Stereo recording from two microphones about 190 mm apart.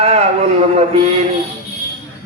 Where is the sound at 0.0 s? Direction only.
35° right (ahead or behind).